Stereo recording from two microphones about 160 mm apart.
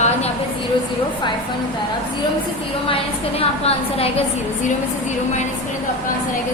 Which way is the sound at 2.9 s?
40° left (ahead or behind).